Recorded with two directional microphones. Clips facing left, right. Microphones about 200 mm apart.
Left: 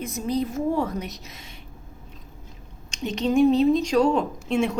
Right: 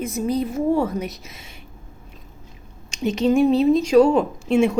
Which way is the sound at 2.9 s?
10° right (ahead or behind).